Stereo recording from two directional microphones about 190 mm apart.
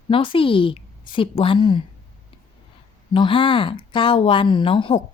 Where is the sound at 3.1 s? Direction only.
25° left (ahead or behind).